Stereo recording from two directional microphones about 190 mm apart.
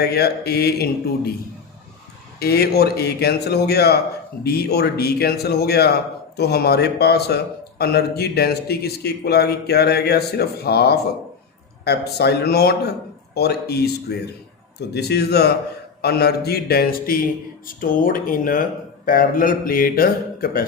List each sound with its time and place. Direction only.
0.0 s a man's voice: 55° left (ahead or behind)
2.4 s a man's voice: 55° left (ahead or behind)